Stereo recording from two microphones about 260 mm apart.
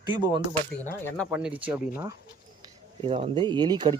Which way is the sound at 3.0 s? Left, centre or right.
Right.